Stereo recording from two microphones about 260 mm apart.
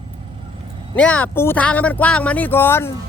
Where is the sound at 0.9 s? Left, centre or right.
Centre.